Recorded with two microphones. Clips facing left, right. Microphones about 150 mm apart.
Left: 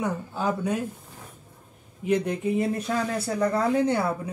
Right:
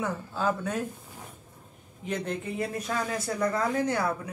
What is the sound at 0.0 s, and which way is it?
Speech, 15° left (ahead or behind).